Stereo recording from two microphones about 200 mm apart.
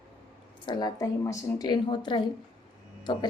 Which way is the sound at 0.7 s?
20° left (ahead or behind).